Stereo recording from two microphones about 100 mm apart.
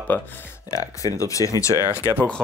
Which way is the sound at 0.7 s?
35° left (ahead or behind).